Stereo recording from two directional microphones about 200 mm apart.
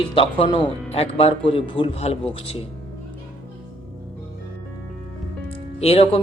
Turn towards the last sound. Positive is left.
turn(degrees=30)  # may be behind; listen again after turning